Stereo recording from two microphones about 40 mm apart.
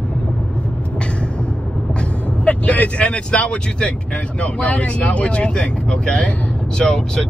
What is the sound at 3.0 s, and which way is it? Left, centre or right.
Speech, left.